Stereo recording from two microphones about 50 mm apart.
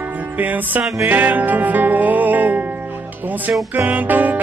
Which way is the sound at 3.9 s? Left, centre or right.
Right.